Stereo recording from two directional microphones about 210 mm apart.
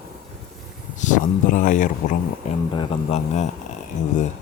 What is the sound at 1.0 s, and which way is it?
Speech, 35° left (ahead or behind).